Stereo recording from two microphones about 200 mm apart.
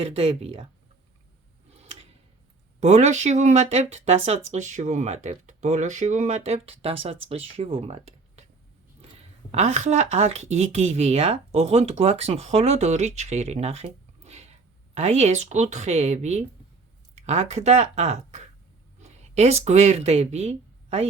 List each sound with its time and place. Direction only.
0.0 s speech: 30° right (ahead or behind)
1.7 s tick-tock: 30° right (ahead or behind)
2.8 s speech: 35° right (ahead or behind)
9.5 s speech: 35° right (ahead or behind)
14.3 s a sound: 35° right (ahead or behind)
14.9 s speech: 35° right (ahead or behind)